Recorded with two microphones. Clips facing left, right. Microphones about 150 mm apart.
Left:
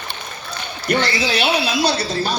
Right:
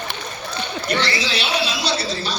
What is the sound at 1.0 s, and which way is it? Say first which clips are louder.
A man's voice: left 5 dB; 50° left (ahead or behind).